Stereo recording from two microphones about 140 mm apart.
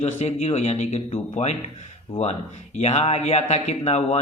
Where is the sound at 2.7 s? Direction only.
50° left (ahead or behind).